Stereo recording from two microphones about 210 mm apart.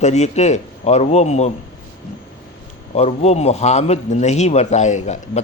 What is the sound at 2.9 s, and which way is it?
A man's voice, 30° left (ahead or behind).